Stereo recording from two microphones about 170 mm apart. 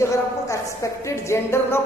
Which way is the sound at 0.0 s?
15° left (ahead or behind).